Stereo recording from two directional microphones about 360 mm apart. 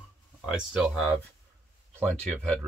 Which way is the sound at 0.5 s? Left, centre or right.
Centre.